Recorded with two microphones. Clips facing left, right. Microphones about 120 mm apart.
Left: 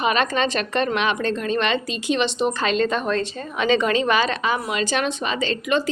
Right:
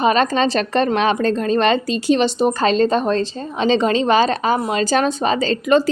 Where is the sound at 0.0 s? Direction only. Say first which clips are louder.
Right 5 dB; 35° right (ahead or behind).